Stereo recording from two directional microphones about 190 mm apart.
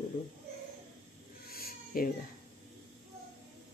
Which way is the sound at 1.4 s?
50° left (ahead or behind).